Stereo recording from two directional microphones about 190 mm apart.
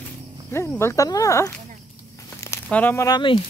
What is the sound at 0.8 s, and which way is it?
Speech, 15° left (ahead or behind).